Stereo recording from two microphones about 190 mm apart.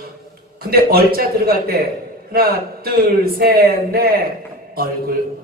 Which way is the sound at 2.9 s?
55° right (ahead or behind).